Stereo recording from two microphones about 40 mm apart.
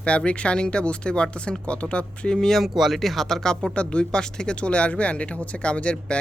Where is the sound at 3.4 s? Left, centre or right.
Centre.